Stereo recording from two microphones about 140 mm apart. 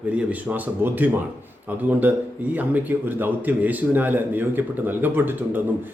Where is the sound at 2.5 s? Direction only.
10° right (ahead or behind).